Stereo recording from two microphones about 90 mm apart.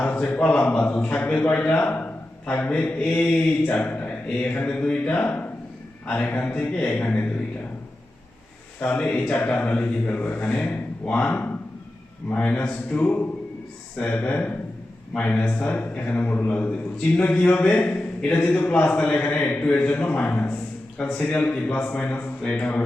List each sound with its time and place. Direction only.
0.0 s a man's voice: 20° left (ahead or behind)
8.8 s a man's voice: 15° left (ahead or behind)